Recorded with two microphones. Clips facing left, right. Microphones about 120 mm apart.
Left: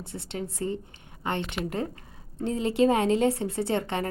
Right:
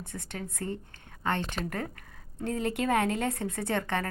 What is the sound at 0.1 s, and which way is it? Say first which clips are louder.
A woman's voice: left 7 dB; 20° left (ahead or behind).